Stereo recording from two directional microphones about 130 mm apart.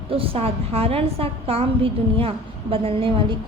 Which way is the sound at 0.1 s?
45° right (ahead or behind).